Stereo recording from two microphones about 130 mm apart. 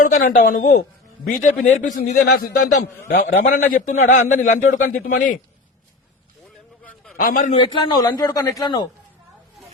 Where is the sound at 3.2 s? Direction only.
90° left.